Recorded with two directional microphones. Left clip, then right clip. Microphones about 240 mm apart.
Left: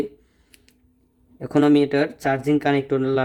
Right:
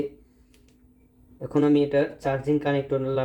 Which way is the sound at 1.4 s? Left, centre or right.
Left.